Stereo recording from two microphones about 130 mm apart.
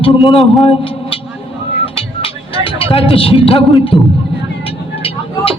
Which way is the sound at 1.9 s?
45° left (ahead or behind).